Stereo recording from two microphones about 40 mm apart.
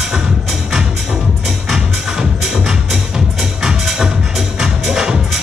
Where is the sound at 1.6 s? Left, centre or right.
Centre.